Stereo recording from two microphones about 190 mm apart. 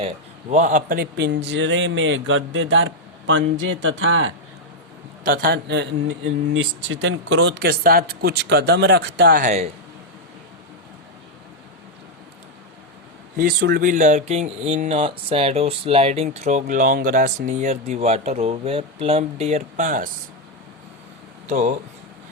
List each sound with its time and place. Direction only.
0.5 s a man's voice: 40° right (ahead or behind); by 4.3 s 90° right
5.2 s speech: 50° right (ahead or behind)
9.4 s speech: 35° right (ahead or behind)
13.3 s speech: 55° right (ahead or behind)
21.5 s speech: 40° right (ahead or behind)